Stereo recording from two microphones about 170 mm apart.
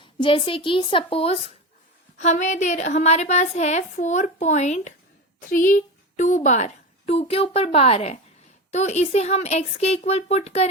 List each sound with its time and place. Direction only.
0.0 s a woman's voice: 30° left (ahead or behind)